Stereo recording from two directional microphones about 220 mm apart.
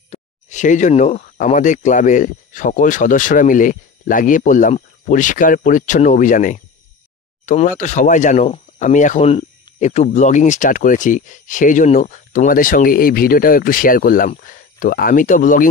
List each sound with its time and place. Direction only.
0.1 s speech: 35° left (ahead or behind)